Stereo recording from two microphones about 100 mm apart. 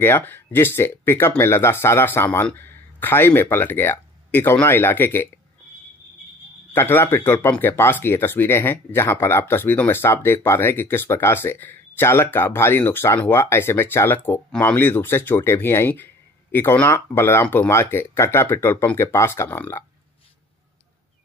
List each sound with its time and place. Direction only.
0.0 s speech: 20° left (ahead or behind)
6.7 s speech: 20° left (ahead or behind)